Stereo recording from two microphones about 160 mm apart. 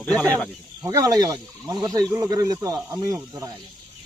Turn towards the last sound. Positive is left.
turn(degrees=-20)  # may be behind; listen again after turning